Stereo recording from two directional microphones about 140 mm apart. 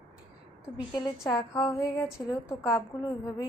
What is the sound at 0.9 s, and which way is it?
A woman's voice, 25° left (ahead or behind).